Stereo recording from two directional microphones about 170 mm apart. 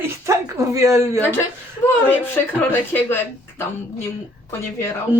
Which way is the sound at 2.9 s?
10° left (ahead or behind).